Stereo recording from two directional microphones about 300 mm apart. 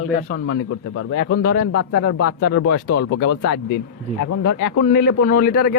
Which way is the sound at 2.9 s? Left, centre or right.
Left.